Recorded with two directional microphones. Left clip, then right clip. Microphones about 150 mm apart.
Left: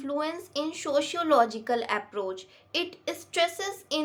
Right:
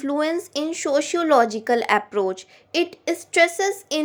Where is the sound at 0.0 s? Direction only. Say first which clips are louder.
Right 8 dB; 50° right (ahead or behind).